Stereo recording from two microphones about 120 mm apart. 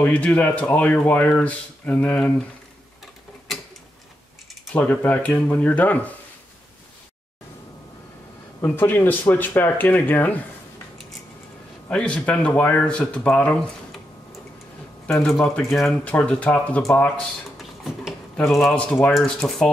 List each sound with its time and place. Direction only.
0.0 s speech: 15° left (ahead or behind)
4.7 s speech: 15° left (ahead or behind)
8.5 s speech: 20° left (ahead or behind)
11.9 s speech: 10° left (ahead or behind)
15.0 s speech: 5° left (ahead or behind)
17.6 s a sound: centre (ahead or behind)
19.1 s speech: 5° left (ahead or behind)